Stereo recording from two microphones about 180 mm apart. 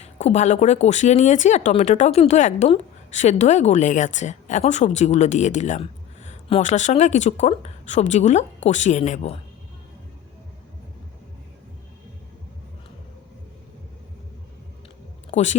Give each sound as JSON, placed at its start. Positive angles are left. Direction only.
{"t": 0.0, "sound": "speech", "side_deg": 35}
{"t": 15.3, "sound": "speech", "side_deg": 40}